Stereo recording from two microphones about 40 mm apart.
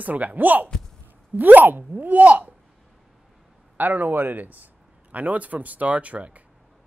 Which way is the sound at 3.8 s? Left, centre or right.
Right.